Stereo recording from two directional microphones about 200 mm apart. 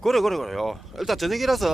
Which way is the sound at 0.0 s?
Centre (ahead or behind).